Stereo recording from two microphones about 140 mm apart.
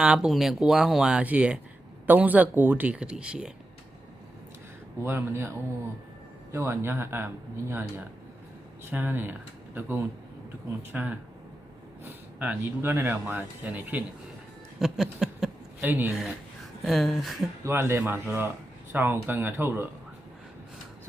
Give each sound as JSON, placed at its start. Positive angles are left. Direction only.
{"t": 0.0, "sound": "speech", "side_deg": -5}
{"t": 5.0, "sound": "speech", "side_deg": -20}
{"t": 10.9, "sound": "speech", "side_deg": -15}
{"t": 14.8, "sound": "a sound", "side_deg": -5}
{"t": 15.9, "sound": "speech", "side_deg": -15}
{"t": 16.8, "sound": "speech", "side_deg": 0}
{"t": 17.6, "sound": "speech", "side_deg": -20}